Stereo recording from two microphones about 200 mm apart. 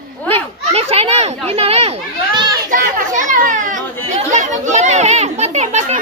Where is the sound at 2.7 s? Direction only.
40° right (ahead or behind).